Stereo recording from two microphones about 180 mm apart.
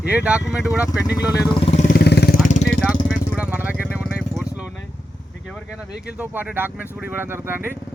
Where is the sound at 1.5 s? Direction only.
30° left (ahead or behind).